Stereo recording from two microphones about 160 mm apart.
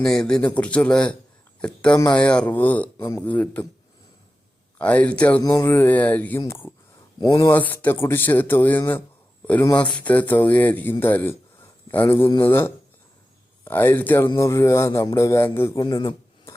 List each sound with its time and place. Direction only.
0.0 s speech: 5° left (ahead or behind)
4.8 s speech: 10° left (ahead or behind)
5.4 s a man's voice: 20° left (ahead or behind)